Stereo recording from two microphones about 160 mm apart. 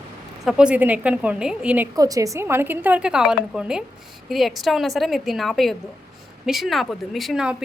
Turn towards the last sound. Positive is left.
turn(degrees=-5)  # may be behind; listen again after turning